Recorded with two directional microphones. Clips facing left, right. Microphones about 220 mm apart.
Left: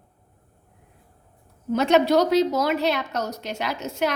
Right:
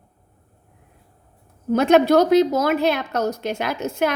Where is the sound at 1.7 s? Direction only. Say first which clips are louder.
Right 4 dB; 50° right (ahead or behind).